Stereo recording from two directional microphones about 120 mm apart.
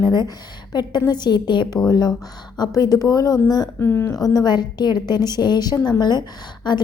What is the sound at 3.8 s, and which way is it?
Speech, 20° left (ahead or behind).